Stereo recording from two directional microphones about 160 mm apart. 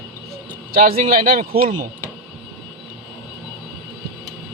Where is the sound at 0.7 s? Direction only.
60° right (ahead or behind).